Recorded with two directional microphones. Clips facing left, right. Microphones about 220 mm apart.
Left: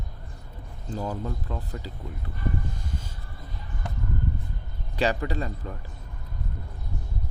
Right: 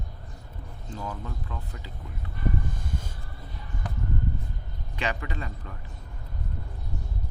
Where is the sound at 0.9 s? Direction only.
35° left (ahead or behind).